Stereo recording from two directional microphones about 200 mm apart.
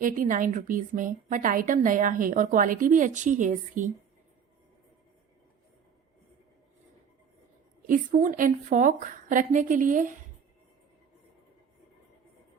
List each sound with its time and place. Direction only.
0.0 s a woman's voice: 40° right (ahead or behind)
7.9 s a woman's voice: 40° right (ahead or behind)